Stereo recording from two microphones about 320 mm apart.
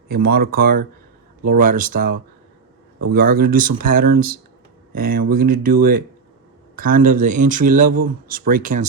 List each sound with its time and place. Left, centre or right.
0.1 s speech: right